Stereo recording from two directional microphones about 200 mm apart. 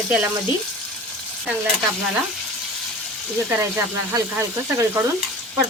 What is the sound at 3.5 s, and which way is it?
Frying, 15° right (ahead or behind).